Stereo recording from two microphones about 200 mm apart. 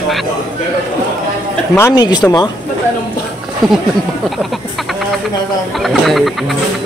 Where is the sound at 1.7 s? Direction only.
15° left (ahead or behind).